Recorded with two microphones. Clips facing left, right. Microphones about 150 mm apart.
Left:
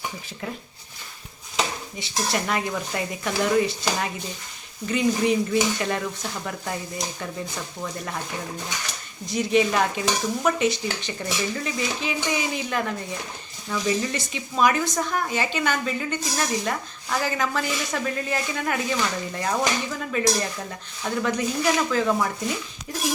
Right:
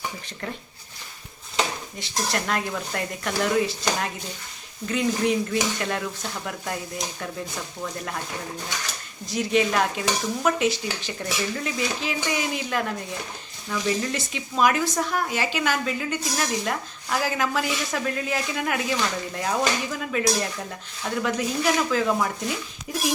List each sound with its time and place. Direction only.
1.5 s speech: centre (ahead or behind)
9.2 s speech: centre (ahead or behind)